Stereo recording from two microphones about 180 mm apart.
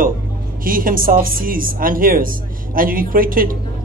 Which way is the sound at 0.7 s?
50° right (ahead or behind).